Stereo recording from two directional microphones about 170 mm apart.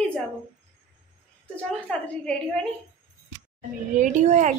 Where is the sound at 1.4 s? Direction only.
5° left (ahead or behind).